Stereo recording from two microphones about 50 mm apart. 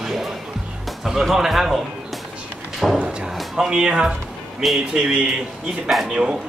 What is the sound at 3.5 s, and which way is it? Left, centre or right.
Speech, centre.